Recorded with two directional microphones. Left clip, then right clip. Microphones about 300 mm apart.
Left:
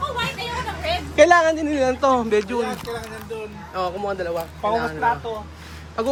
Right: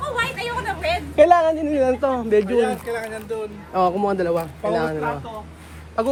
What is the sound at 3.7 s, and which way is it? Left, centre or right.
Speech, centre.